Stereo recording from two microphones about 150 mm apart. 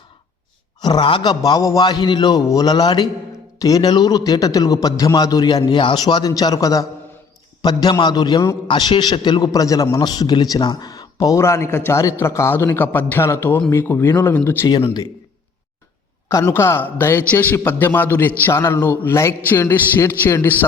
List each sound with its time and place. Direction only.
0.8 s a man's voice: 30° left (ahead or behind)
14.7 s a man's voice: 30° left (ahead or behind)
16.3 s a man's voice: 20° left (ahead or behind)